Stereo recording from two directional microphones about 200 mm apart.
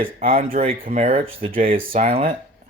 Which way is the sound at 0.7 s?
45° right (ahead or behind).